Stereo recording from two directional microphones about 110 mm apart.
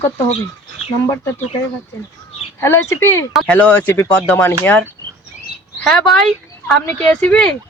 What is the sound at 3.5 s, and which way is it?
Speech, 10° left (ahead or behind).